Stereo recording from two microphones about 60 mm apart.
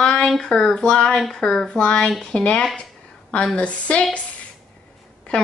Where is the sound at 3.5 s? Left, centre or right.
Left.